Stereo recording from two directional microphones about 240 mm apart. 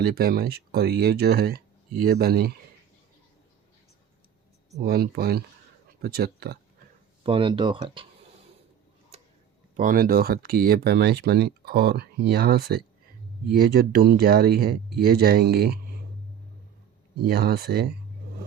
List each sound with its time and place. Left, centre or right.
0.0 s speech: right
4.8 s speech: right
7.3 s speech: right
9.1 s tick-tock: right
9.7 s speech: right
17.2 s speech: right